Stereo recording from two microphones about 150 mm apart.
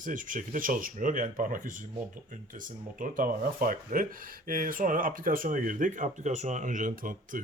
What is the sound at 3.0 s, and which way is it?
Speech, 65° right (ahead or behind).